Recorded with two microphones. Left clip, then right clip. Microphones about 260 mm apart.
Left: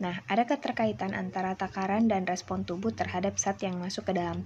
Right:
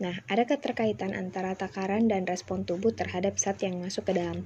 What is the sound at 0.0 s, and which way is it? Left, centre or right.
A woman's voice, centre.